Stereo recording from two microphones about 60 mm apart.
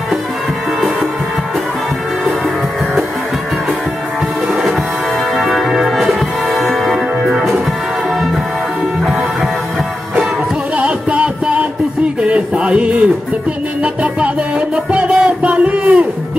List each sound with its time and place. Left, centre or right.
5.3 s music: centre
10.8 s music: right
14.9 s music: centre